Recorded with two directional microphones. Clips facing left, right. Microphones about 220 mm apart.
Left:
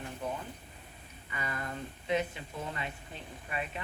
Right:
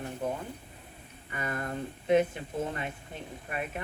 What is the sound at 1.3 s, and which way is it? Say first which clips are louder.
Speech: right 4 dB; 50° right (ahead or behind).